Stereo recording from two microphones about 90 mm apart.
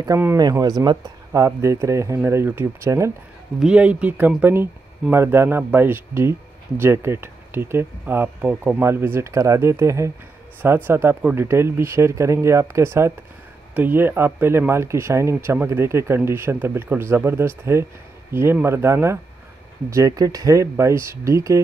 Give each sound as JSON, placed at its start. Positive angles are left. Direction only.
{"t": 0.4, "sound": "speech", "side_deg": -45}
{"t": 3.5, "sound": "speech", "side_deg": -10}
{"t": 19.9, "sound": "speech", "side_deg": -40}